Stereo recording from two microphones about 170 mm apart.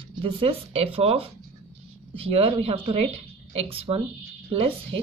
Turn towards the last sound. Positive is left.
turn(degrees=-35)  # may be behind; listen again after turning